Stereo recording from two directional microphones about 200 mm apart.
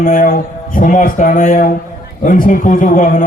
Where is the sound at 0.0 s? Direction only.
45° left (ahead or behind).